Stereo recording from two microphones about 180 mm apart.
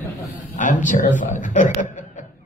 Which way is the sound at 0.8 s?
45° left (ahead or behind).